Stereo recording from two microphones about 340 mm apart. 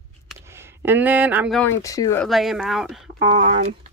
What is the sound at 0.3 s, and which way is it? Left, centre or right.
Speech, centre.